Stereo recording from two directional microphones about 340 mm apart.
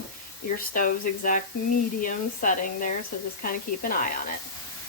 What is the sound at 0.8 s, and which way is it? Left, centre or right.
Speech, left.